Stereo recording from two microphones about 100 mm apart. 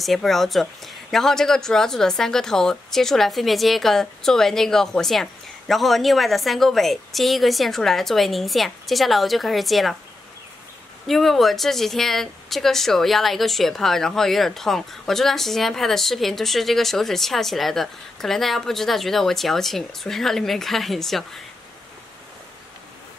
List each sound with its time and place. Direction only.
0.0 s speech: centre (ahead or behind)
11.1 s speech: centre (ahead or behind)